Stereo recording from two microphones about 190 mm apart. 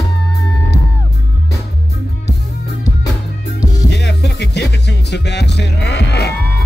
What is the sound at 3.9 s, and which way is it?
Music, 65° left (ahead or behind).